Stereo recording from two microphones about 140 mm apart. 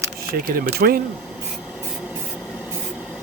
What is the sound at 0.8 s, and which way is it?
Speech, 90° right.